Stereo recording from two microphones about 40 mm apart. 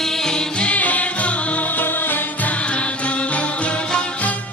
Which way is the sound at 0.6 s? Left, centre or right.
Left.